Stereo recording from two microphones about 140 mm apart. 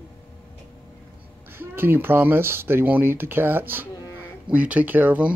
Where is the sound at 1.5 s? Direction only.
15° right (ahead or behind).